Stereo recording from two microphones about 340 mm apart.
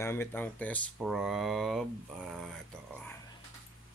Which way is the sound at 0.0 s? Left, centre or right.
Centre.